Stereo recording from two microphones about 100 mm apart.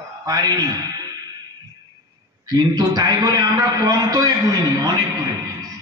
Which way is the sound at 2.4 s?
40° right (ahead or behind).